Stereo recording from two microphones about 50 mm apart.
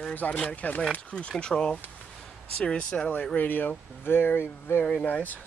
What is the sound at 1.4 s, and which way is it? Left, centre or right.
Speech, centre.